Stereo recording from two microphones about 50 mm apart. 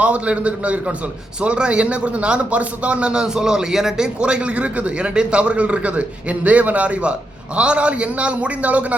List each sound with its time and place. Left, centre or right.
0.0 s speech: right